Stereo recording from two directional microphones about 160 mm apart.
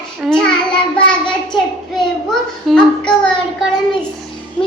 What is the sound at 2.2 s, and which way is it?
A woman's voice, 5° left (ahead or behind).